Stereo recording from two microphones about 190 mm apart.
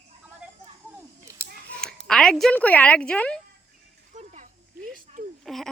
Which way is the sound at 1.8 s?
5° left (ahead or behind).